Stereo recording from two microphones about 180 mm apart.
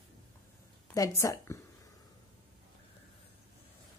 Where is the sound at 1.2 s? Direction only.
15° left (ahead or behind).